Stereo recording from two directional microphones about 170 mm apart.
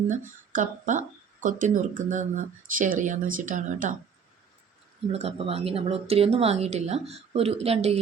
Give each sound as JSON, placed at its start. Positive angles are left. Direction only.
{"t": 0.1, "sound": "speech", "side_deg": -50}
{"t": 5.1, "sound": "speech", "side_deg": -35}